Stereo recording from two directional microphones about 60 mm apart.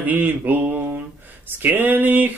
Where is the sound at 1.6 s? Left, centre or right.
Right.